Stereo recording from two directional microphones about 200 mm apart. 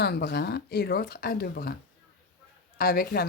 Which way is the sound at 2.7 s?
50° left (ahead or behind).